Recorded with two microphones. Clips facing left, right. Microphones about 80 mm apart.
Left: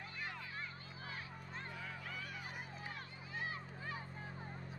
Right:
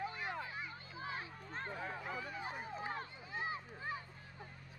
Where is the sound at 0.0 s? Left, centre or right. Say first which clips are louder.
Right 6 dB; right.